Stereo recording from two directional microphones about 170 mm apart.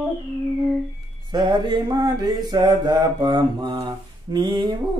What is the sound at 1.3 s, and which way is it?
Mantra, 25° right (ahead or behind).